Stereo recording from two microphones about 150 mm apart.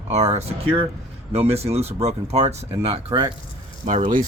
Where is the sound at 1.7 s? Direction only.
45° right (ahead or behind).